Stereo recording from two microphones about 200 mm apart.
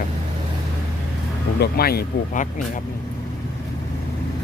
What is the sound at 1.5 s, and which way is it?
Speech, 50° left (ahead or behind).